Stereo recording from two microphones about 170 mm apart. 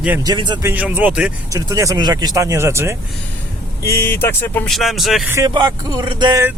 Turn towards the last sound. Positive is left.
turn(degrees=-25)  # may be behind; listen again after turning